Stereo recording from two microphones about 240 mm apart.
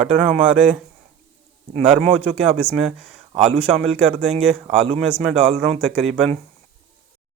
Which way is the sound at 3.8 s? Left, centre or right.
Centre.